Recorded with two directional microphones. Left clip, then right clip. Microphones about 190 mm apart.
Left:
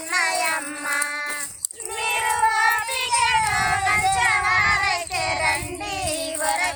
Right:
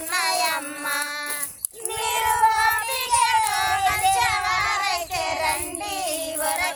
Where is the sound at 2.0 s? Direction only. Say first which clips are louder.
Right 1 dB; 60° right (ahead or behind).